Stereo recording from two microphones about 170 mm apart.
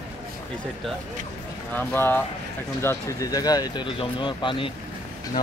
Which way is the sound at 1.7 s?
10° left (ahead or behind).